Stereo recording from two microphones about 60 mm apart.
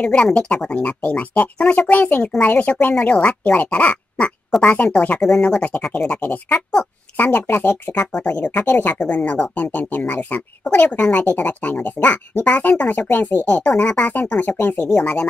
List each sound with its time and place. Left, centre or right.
0.0 s speech: centre; by 7.7 s left
7.9 s speech: left
8.2 s speech: left
8.9 s speech: left
15.0 s speech: centre